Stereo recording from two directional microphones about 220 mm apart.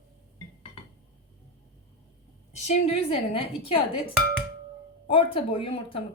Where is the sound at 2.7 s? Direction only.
25° left (ahead or behind).